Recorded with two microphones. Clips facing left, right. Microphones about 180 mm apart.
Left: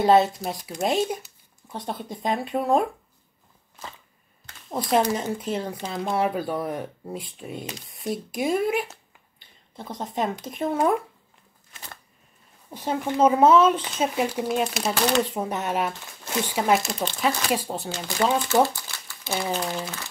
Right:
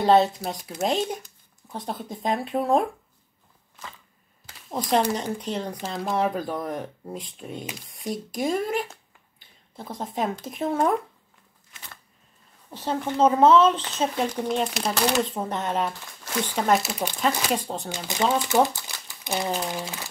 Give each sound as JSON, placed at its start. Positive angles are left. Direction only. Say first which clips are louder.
{"t": 0.0, "sound": "speech", "louder": "even", "side_deg": 5}
{"t": 4.5, "sound": "typing", "louder": "even", "side_deg": 0}
{"t": 5.1, "sound": "speech", "louder": "left 1 dB", "side_deg": 5}
{"t": 12.7, "sound": "speech", "louder": "left 1 dB", "side_deg": 10}
{"t": 16.8, "sound": "speech", "louder": "left 1 dB", "side_deg": -10}
{"t": 17.2, "sound": "speech", "louder": "even", "side_deg": 5}
{"t": 17.8, "sound": "speech", "louder": "left 1 dB", "side_deg": -15}